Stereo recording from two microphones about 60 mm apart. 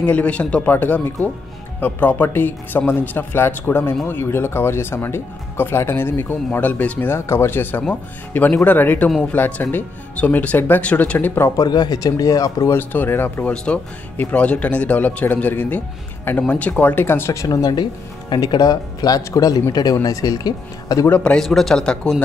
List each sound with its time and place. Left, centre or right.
0.0 s speech: left
7.2 s speech: left
11.1 s speech: left
11.5 s speech: left
12.9 s speech: left
13.7 s speech: centre; by 17.3 s left
17.3 s speech: left
21.4 s speech: centre